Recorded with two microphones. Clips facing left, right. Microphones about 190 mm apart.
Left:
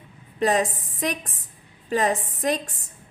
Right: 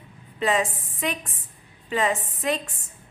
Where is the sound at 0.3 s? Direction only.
40° left (ahead or behind).